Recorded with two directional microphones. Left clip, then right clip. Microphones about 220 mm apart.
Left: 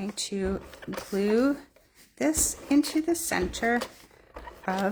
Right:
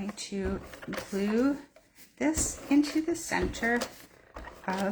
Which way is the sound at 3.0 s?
50° left (ahead or behind).